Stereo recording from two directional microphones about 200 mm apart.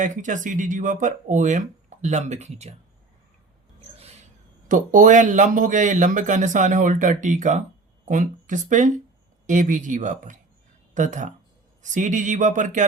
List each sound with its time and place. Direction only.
0.0 s speech: 40° right (ahead or behind)
4.7 s speech: 40° right (ahead or behind)